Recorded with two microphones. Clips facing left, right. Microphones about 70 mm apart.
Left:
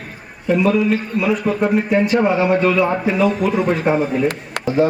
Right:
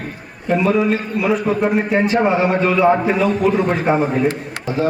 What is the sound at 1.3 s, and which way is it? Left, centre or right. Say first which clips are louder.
A man's voice: right 1 dB; right.